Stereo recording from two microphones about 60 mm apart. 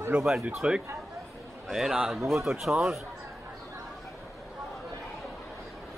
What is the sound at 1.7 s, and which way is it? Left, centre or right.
A man's voice, centre.